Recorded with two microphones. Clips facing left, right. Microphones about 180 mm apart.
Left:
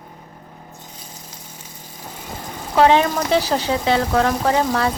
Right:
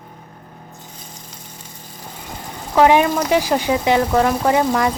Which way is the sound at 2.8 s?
15° right (ahead or behind).